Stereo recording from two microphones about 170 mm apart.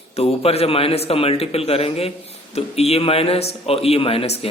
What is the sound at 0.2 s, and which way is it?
A man's voice, 35° left (ahead or behind).